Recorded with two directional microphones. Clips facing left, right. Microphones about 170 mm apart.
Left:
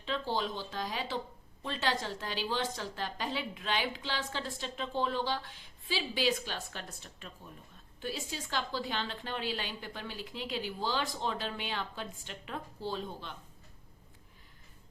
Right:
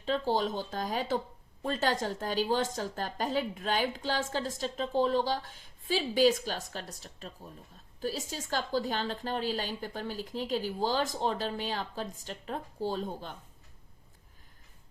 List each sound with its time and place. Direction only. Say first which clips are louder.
0.0 s a woman's voice: right 5 dB; 40° right (ahead or behind)